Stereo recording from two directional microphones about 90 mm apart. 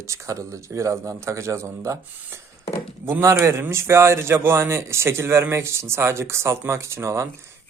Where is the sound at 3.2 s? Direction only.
30° right (ahead or behind).